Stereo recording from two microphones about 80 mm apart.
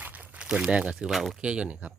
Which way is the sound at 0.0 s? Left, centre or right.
Right.